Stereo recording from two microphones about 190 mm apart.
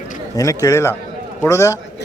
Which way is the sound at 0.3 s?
15° left (ahead or behind).